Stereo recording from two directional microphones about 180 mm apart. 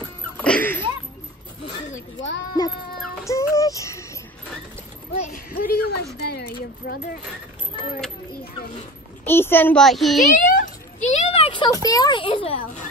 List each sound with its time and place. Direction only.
0.4 s music: 10° left (ahead or behind)
3.3 s music: 15° left (ahead or behind)
5.2 s speech: 55° left (ahead or behind)
6.1 s speech: 65° left (ahead or behind)
9.2 s a child's voice: 10° left (ahead or behind)
10.3 s a sound: 50° left (ahead or behind); by 12.5 s 30° left (ahead or behind)